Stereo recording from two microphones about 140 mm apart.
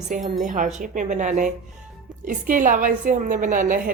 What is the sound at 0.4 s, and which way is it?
A woman's voice, 65° right (ahead or behind).